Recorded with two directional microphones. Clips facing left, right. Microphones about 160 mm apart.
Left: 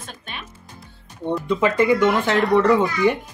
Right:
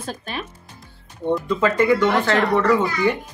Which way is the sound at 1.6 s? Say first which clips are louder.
Left 1 dB; 15° left (ahead or behind).